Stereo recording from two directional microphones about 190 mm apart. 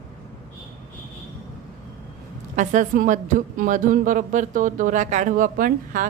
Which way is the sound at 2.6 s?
40° right (ahead or behind).